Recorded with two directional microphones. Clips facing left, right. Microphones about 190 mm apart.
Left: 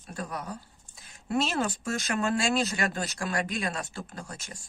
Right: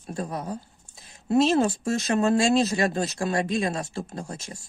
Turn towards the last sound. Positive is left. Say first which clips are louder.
# right 6 dB
turn(degrees=-25)  # may be behind; listen again after turning